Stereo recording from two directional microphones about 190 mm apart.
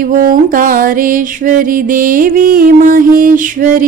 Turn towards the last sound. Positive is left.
turn(degrees=-45)  # may be behind; listen again after turning